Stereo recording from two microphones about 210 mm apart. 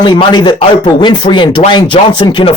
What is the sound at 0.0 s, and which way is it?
Speech, 20° left (ahead or behind).